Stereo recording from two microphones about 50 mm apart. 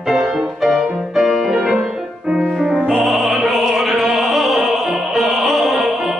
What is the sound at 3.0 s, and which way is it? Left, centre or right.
Opera, centre.